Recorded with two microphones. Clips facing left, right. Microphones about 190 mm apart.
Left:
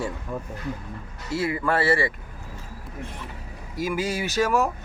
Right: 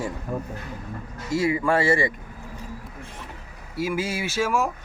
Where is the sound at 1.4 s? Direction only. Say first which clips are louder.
Right 2 dB; 10° right (ahead or behind).